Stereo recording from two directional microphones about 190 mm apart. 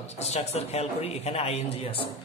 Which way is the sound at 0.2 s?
35° left (ahead or behind).